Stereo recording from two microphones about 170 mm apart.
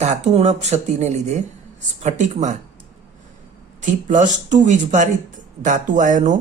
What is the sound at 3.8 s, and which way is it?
Speech, 45° right (ahead or behind).